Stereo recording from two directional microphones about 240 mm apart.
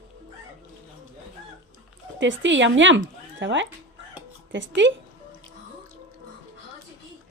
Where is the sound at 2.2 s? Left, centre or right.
Right.